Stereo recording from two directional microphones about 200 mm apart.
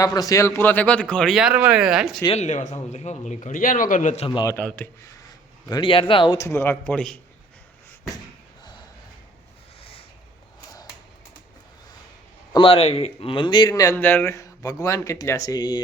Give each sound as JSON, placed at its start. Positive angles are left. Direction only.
{"t": 0.0, "sound": "speech", "side_deg": 20}
{"t": 2.3, "sound": "a man's voice", "side_deg": 35}
{"t": 4.3, "sound": "a man's voice", "side_deg": 20}
{"t": 4.5, "sound": "speech", "side_deg": 10}
{"t": 12.5, "sound": "a man's voice", "side_deg": 30}
{"t": 13.9, "sound": "speech", "side_deg": 10}